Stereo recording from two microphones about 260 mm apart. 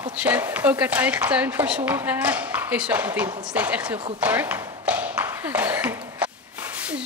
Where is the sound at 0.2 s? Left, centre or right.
Centre.